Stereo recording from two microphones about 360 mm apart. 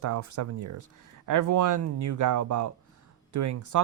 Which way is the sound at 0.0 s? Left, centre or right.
Right.